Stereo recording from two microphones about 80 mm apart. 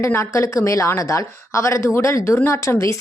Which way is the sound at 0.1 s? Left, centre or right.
Left.